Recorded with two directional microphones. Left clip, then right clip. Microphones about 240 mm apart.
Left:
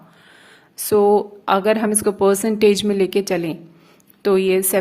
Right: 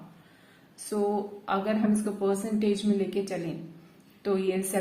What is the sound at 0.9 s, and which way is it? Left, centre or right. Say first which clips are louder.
A woman's voice: left 14 dB; left.